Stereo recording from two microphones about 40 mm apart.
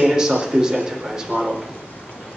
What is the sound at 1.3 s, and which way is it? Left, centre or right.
Speech, right.